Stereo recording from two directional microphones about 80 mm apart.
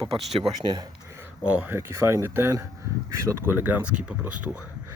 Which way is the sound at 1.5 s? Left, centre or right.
Centre.